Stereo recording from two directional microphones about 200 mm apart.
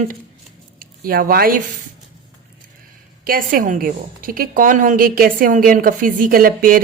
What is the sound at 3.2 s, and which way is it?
A woman's voice, 45° right (ahead or behind).